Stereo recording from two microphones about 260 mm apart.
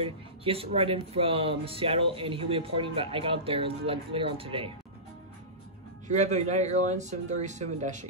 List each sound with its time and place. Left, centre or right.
0.0 s speech: right
6.0 s speech: right